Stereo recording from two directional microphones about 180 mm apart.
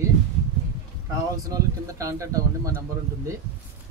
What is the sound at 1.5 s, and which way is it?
Speech, 20° right (ahead or behind).